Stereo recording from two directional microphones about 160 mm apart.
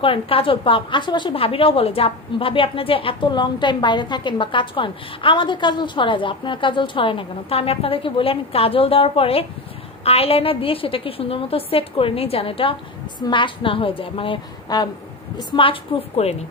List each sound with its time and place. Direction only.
0.0 s a woman's voice: 35° left (ahead or behind)